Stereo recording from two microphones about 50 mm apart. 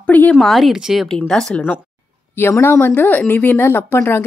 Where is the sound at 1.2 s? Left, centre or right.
Centre.